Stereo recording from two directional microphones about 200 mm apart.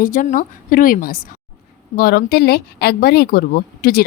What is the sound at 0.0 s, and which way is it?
Speech, 40° left (ahead or behind).